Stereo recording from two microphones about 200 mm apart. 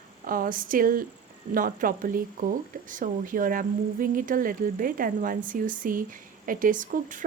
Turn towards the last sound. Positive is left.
turn(degrees=-40)  # may be behind; listen again after turning